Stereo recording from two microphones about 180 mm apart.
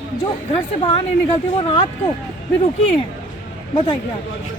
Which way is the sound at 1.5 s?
25° left (ahead or behind).